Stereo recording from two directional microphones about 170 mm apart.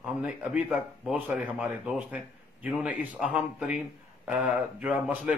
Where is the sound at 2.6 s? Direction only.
10° right (ahead or behind).